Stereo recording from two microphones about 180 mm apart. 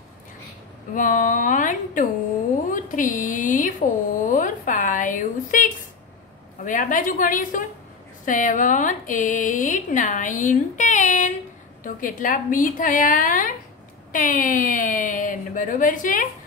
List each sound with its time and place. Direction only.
0.9 s speech: 45° left (ahead or behind)
2.7 s a sound: 45° left (ahead or behind)
6.6 s speech: 45° left (ahead or behind)